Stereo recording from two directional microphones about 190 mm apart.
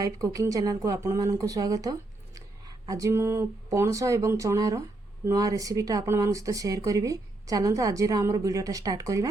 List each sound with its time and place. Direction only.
0.0 s speech: 15° right (ahead or behind)